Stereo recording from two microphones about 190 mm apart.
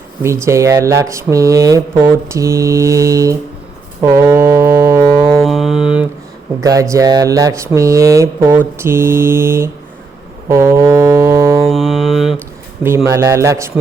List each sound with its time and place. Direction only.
0.4 s speech: 15° right (ahead or behind)
4.0 s music: 15° right (ahead or behind)
5.4 s mantra: centre (ahead or behind)
6.6 s speech: 20° right (ahead or behind)
10.5 s music: 15° right (ahead or behind)
11.7 s mantra: centre (ahead or behind)
13.1 s speech: 15° right (ahead or behind)